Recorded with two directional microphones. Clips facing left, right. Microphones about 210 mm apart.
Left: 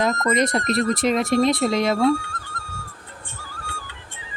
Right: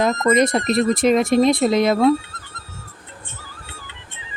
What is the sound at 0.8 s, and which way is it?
Speech, 20° right (ahead or behind).